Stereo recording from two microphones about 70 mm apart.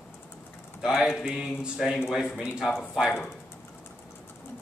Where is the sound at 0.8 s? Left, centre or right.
Centre.